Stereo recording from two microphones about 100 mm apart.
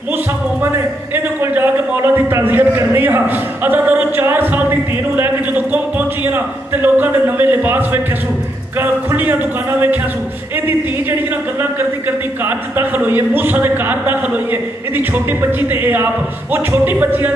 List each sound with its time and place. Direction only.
1.1 s a man's voice: 20° right (ahead or behind)
12.4 s speech: 20° right (ahead or behind)